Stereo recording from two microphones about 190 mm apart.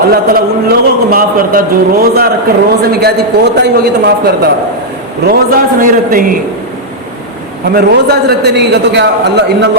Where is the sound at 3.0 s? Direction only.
60° right (ahead or behind).